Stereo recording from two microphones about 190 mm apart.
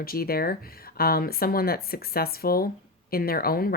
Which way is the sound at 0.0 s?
50° left (ahead or behind).